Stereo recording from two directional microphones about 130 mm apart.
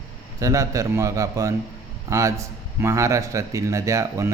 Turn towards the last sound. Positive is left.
turn(degrees=-25)  # may be behind; listen again after turning